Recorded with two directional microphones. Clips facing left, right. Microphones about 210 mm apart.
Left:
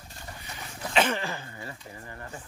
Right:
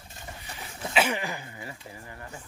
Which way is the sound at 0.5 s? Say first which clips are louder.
Left 1 dB; 5° right (ahead or behind).